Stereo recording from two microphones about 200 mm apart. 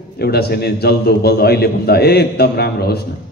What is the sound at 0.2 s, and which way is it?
A man's voice, 50° left (ahead or behind).